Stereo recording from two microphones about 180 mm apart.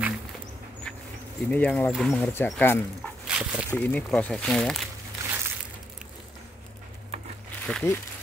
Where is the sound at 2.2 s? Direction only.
10° left (ahead or behind).